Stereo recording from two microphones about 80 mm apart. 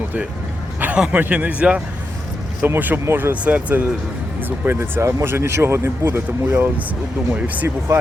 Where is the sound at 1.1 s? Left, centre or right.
Right.